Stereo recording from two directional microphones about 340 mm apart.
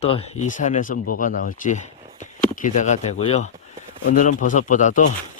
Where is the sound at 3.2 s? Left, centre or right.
Centre.